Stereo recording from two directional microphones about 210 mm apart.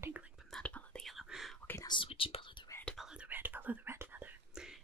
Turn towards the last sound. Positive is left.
turn(degrees=-5)  # may be behind; listen again after turning